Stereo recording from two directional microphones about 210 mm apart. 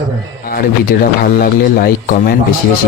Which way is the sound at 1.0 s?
45° left (ahead or behind).